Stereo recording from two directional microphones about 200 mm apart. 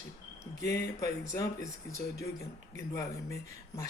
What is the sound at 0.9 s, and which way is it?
Speech, 15° left (ahead or behind).